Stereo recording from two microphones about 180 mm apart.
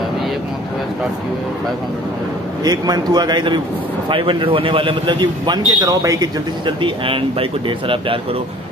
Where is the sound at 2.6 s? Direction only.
20° right (ahead or behind).